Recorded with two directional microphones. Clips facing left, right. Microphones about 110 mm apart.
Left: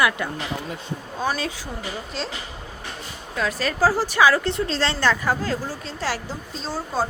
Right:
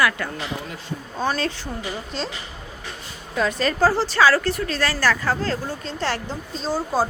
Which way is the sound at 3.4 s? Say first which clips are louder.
Right 2 dB; centre (ahead or behind).